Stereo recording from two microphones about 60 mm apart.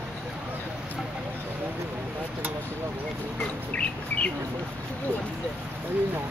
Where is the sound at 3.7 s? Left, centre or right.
Left.